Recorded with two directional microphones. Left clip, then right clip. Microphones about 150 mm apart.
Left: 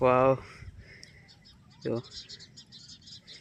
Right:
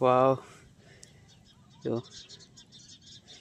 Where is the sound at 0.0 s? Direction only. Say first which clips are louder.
Even; centre (ahead or behind).